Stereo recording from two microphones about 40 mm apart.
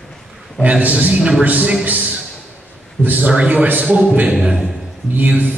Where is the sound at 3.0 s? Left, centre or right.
Right.